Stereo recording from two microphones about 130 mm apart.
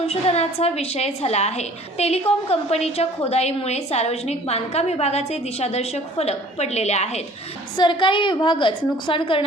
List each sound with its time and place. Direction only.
0.0 s a woman's voice: 50° left (ahead or behind)
7.8 s a woman's voice: 35° left (ahead or behind)